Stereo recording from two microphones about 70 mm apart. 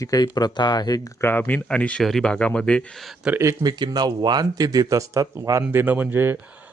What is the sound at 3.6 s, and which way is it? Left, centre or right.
Speech, right.